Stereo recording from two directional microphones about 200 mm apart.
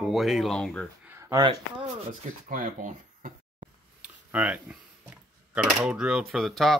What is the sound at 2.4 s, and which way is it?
Speech, 45° right (ahead or behind).